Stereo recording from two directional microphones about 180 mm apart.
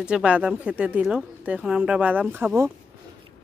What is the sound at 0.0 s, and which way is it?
Speech, 5° right (ahead or behind).